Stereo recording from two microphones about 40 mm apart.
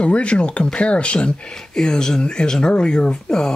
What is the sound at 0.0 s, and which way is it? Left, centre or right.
Speech, left.